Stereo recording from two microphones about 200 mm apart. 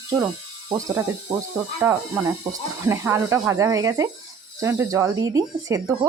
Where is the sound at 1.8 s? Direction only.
10° right (ahead or behind).